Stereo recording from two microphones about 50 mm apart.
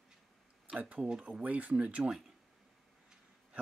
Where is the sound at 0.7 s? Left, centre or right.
Right.